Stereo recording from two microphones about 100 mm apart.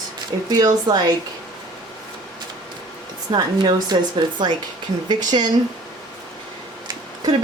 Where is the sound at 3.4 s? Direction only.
45° right (ahead or behind).